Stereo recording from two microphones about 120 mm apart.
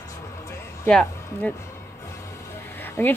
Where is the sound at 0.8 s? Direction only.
5° left (ahead or behind).